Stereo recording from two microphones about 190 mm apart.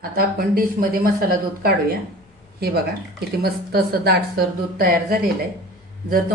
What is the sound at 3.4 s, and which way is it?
Speech, 55° right (ahead or behind).